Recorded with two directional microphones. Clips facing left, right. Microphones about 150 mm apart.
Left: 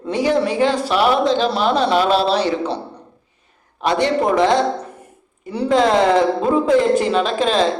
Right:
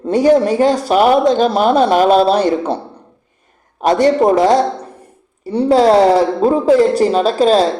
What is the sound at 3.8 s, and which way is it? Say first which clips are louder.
A woman's voice: right 6 dB; 45° right (ahead or behind).